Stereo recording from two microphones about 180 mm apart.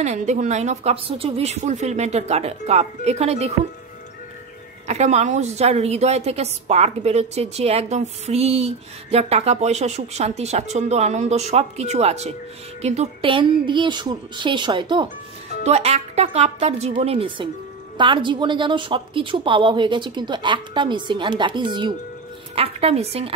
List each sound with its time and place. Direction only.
0.0 s a woman's voice: 40° right (ahead or behind)
4.8 s a woman's voice: 40° right (ahead or behind)